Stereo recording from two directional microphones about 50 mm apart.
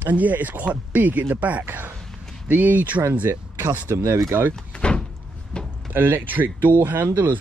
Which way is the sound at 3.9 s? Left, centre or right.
Right.